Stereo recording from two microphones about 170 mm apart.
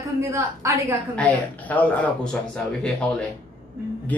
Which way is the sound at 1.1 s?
10° left (ahead or behind).